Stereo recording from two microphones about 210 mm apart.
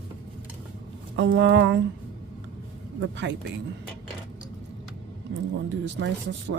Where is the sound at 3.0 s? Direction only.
60° right (ahead or behind).